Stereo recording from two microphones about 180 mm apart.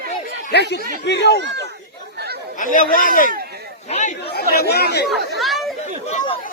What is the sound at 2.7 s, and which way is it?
Speech, 50° left (ahead or behind).